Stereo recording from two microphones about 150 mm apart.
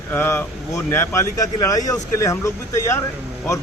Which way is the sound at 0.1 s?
15° left (ahead or behind).